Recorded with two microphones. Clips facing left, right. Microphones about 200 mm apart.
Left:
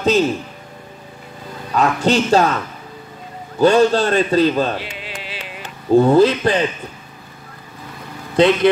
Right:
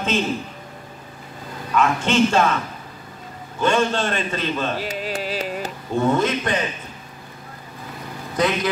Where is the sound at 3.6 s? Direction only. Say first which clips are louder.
Left 7 dB; 35° left (ahead or behind).